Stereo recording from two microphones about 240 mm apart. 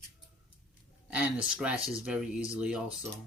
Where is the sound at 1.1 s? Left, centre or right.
Centre.